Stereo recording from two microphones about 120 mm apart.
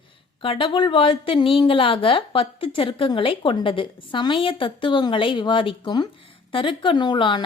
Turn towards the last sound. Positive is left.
turn(degrees=40)  # may be behind; listen again after turning